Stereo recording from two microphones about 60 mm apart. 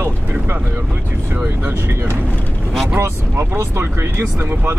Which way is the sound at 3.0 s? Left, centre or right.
Right.